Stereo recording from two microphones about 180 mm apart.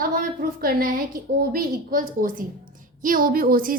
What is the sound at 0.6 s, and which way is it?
A woman's voice, 50° right (ahead or behind).